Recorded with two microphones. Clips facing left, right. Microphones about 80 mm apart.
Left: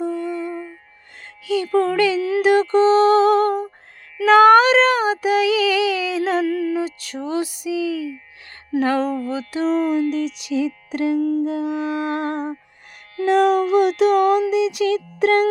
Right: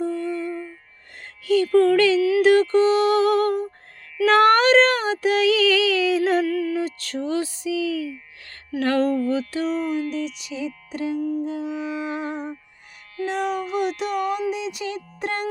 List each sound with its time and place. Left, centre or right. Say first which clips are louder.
0.0 s music: left 1 dB; centre
1.6 s child singing: right 1 dB; centre
2.4 s a sound: left 3 dB; centre
4.3 s child singing: left 5 dB; centre
6.1 s music: right 1 dB; centre
6.4 s a sound: left 2 dB; left
6.7 s mantra: left 1 dB; centre
7.3 s child singing: left 2 dB; centre
9.6 s music: left 5 dB; left
9.8 s music: left 5 dB; left
13.1 s speech: left 9 dB; left